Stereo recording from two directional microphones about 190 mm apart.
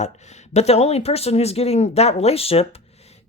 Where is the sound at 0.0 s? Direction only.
35° left (ahead or behind).